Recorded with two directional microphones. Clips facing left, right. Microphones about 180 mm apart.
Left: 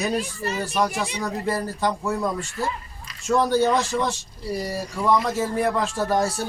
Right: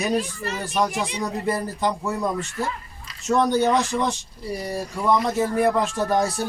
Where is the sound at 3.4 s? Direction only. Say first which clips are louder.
Even; 15° right (ahead or behind).